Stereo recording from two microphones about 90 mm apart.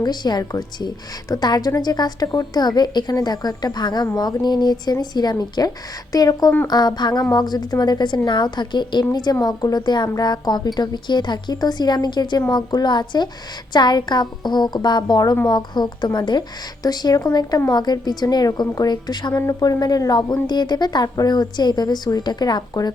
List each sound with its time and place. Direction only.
0.0 s a woman's voice: 50° left (ahead or behind)
19.4 s a woman's voice: 40° left (ahead or behind)